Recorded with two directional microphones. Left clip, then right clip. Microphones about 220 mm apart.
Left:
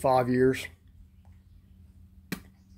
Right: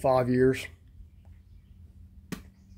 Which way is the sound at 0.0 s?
Centre (ahead or behind).